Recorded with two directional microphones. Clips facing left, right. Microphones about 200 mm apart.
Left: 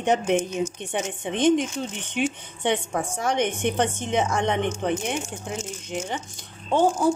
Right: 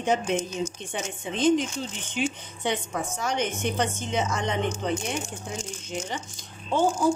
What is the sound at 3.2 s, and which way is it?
Speech, 60° left (ahead or behind).